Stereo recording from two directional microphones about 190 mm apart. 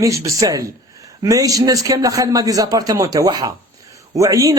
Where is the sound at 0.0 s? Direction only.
15° right (ahead or behind).